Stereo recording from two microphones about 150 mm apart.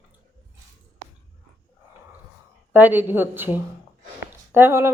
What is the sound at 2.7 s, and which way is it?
Speech, 10° right (ahead or behind).